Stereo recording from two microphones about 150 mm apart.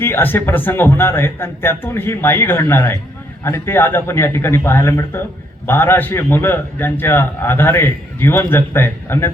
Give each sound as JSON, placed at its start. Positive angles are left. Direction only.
{"t": 0.0, "sound": "a man's voice", "side_deg": 15}